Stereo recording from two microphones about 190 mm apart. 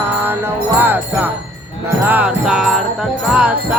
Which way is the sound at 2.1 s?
5° right (ahead or behind).